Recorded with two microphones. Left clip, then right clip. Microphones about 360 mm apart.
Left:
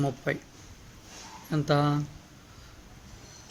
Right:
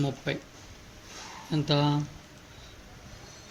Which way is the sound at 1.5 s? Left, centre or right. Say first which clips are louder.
Left 1 dB; left.